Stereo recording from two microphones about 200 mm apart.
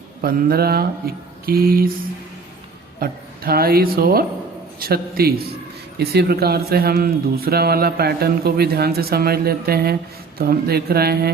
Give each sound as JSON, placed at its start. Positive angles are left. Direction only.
{"t": 0.2, "sound": "speech", "side_deg": -45}
{"t": 3.0, "sound": "speech", "side_deg": -50}